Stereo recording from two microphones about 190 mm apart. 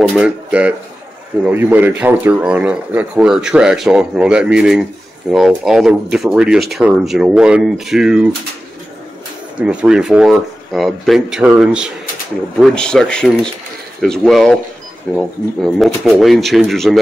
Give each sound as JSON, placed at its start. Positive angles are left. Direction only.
{"t": 0.2, "sound": "speech", "side_deg": -5}
{"t": 9.6, "sound": "speech", "side_deg": -5}